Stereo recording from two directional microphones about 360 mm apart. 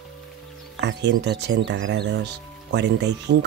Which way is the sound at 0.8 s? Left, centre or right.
Right.